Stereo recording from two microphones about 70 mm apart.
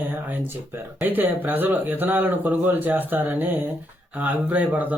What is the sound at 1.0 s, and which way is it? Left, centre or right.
Speech, right.